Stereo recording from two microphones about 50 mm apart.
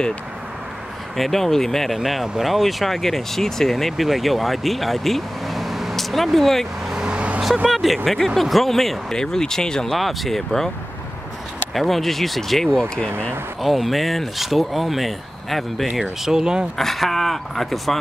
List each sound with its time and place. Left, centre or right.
1.1 s speech: centre
6.9 s vehicle: centre
7.2 s vehicle: right
7.6 s speech: centre
9.9 s speech: centre
11.7 s speech: centre
13.6 s speech: centre
16.0 s speech: centre
16.7 s speech: centre